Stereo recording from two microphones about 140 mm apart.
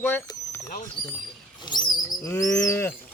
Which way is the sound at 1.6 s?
30° left (ahead or behind).